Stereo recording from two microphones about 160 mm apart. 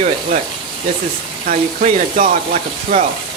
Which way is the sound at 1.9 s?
50° right (ahead or behind).